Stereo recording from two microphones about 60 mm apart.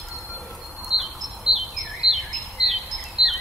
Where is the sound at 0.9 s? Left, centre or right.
Centre.